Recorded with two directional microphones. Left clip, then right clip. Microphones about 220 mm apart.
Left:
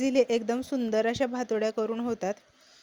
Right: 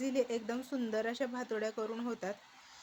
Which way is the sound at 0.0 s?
35° left (ahead or behind).